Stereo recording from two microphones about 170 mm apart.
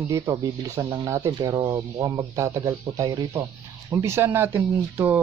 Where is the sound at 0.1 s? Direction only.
15° right (ahead or behind).